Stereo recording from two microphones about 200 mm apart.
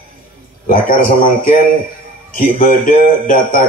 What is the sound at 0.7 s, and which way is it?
Speech, 45° left (ahead or behind).